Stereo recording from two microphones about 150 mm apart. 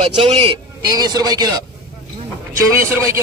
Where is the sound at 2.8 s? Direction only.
20° right (ahead or behind).